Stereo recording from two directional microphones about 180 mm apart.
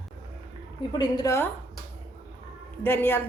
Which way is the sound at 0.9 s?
20° left (ahead or behind).